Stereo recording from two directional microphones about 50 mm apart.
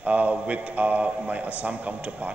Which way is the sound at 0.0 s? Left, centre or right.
Right.